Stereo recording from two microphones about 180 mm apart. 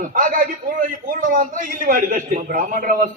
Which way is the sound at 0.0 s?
50° right (ahead or behind).